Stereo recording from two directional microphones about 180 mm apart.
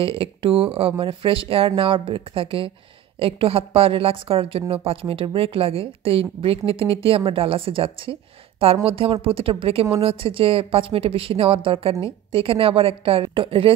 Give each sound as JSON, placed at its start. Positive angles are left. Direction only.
{"t": 0.0, "sound": "a woman's voice", "side_deg": -30}